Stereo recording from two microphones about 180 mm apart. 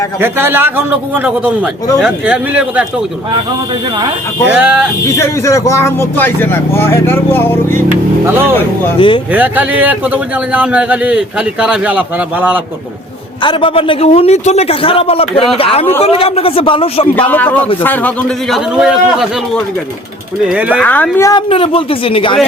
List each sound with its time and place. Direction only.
0.2 s a man's voice: 10° right (ahead or behind)
4.4 s a man's voice: 5° right (ahead or behind)
5.1 s speech: 15° left (ahead or behind)
8.2 s a man's voice: 10° right (ahead or behind)
8.5 s speech: 15° left (ahead or behind)
9.0 s speech: 30° left (ahead or behind)
9.3 s a man's voice: 10° right (ahead or behind)
13.4 s a man's voice: 25° left (ahead or behind)
17.2 s speech: 10° left (ahead or behind)
18.5 s a man's voice: 5° right (ahead or behind)
20.8 s speech: 10° left (ahead or behind)
21.5 s a man's voice: 30° left (ahead or behind)